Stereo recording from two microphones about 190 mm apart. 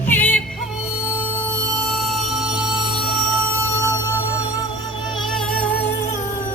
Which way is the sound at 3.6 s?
15° right (ahead or behind).